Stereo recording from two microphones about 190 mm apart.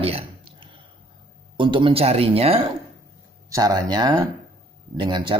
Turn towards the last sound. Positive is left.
turn(degrees=-25)  # may be behind; listen again after turning